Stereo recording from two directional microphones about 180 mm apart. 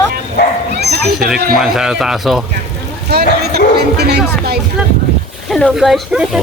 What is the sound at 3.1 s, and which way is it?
Speech, 65° right (ahead or behind).